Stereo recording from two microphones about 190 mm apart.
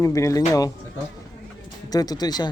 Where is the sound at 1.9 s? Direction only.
20° left (ahead or behind).